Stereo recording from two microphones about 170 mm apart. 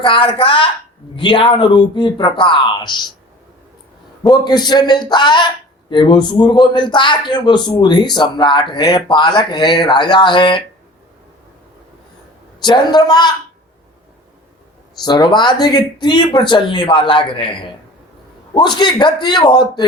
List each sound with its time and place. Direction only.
0.0 s a man's voice: 30° left (ahead or behind)
4.2 s a man's voice: 25° left (ahead or behind)
12.5 s a man's voice: 25° left (ahead or behind)
15.0 s a man's voice: 25° left (ahead or behind)